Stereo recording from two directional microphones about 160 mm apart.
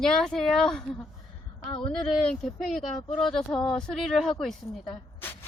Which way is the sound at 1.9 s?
5° left (ahead or behind).